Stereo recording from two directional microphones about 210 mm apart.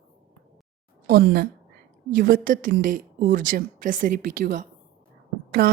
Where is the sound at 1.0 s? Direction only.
45° right (ahead or behind).